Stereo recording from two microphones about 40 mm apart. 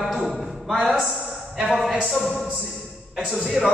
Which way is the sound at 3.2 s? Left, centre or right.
Right.